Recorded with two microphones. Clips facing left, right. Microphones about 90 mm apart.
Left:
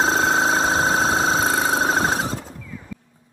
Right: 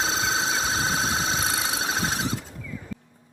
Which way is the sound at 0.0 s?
45° left (ahead or behind).